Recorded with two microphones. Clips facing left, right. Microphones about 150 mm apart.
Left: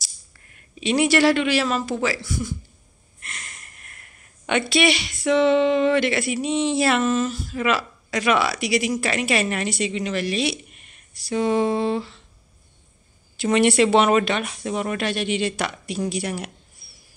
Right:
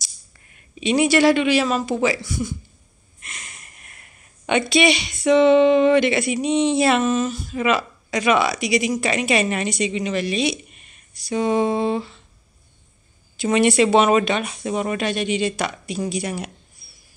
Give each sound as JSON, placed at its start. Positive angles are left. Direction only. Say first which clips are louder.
{"t": 0.8, "sound": "speech", "louder": "right 2 dB", "side_deg": -15}
{"t": 13.4, "sound": "speech", "louder": "right 1 dB", "side_deg": -10}